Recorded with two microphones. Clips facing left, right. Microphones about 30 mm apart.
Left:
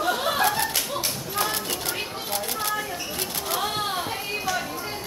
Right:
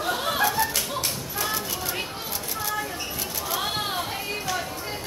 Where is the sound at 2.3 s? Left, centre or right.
Left.